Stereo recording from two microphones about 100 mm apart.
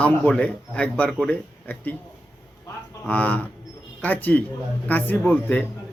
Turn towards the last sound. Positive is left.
turn(degrees=15)  # may be behind; listen again after turning